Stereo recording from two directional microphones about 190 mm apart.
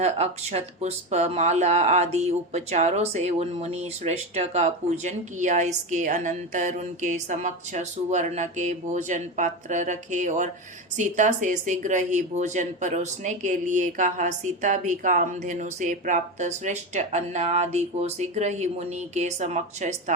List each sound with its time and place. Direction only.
0.0 s speech: 35° right (ahead or behind)